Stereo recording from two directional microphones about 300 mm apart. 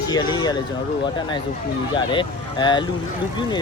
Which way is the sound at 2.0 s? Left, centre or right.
Centre.